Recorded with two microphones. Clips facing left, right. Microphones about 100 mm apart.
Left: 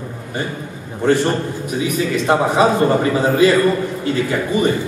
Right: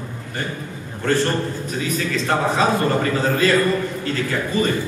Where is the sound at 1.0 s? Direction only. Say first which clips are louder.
Left 4 dB; 15° left (ahead or behind).